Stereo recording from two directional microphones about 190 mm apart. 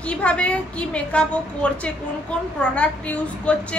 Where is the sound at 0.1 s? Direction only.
5° left (ahead or behind).